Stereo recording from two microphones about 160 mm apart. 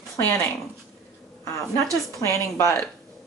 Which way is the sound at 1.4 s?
20° left (ahead or behind).